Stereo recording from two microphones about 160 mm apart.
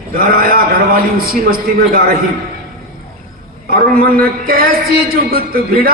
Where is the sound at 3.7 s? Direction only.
65° right (ahead or behind).